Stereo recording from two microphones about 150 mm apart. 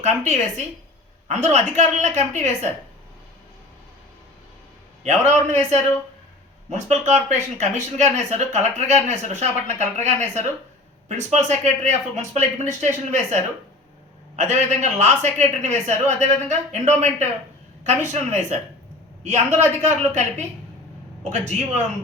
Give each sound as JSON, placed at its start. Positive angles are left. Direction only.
{"t": 0.0, "sound": "a woman's voice", "side_deg": -50}
{"t": 5.0, "sound": "a woman's voice", "side_deg": -50}
{"t": 21.2, "sound": "a woman's voice", "side_deg": -50}